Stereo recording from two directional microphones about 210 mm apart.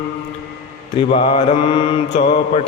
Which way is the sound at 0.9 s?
25° left (ahead or behind).